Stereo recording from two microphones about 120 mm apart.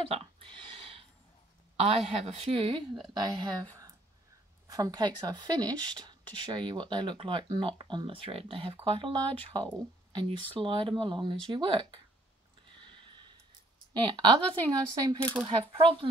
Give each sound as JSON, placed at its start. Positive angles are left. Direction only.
{"t": 0.0, "sound": "speech", "side_deg": -50}
{"t": 0.6, "sound": "a sound", "side_deg": -50}
{"t": 1.8, "sound": "a woman's voice", "side_deg": -55}
{"t": 4.6, "sound": "speech", "side_deg": -30}
{"t": 12.6, "sound": "a sound", "side_deg": -40}
{"t": 13.9, "sound": "speech", "side_deg": -40}
{"t": 15.4, "sound": "speech", "side_deg": -45}